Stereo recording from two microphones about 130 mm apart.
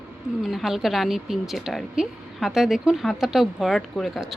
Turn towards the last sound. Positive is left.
turn(degrees=0)  # may be behind; listen again after turning